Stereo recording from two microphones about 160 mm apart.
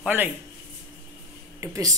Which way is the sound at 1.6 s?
20° right (ahead or behind).